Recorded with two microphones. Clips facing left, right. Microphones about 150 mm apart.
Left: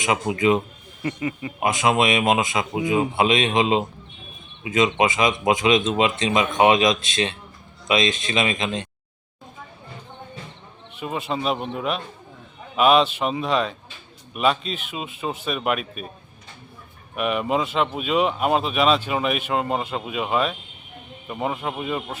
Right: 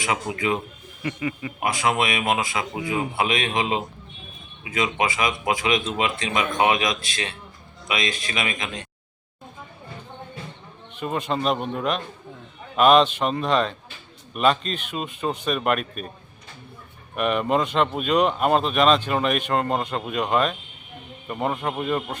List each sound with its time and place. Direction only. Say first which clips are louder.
0.0 s a man's voice: left 5 dB; 20° left (ahead or behind)
10.9 s speech: right 1 dB; 5° left (ahead or behind)
17.2 s speech: right 1 dB; 5° left (ahead or behind)